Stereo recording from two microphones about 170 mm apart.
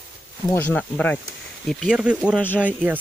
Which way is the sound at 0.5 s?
10° left (ahead or behind).